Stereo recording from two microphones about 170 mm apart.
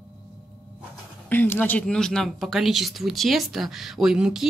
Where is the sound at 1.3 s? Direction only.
10° left (ahead or behind).